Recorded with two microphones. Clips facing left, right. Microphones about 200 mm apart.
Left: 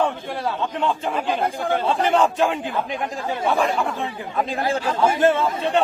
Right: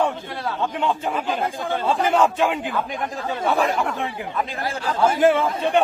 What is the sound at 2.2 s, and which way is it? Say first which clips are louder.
A man's voice: even; centre (ahead or behind).